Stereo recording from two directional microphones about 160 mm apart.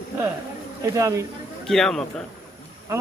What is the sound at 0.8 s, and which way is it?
Speech, 20° right (ahead or behind).